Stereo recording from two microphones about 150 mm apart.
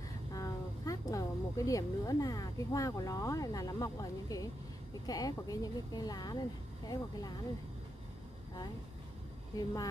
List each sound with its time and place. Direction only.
0.3 s speech: 25° left (ahead or behind)